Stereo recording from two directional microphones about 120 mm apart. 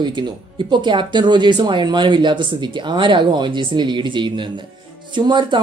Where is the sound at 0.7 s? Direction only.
40° right (ahead or behind).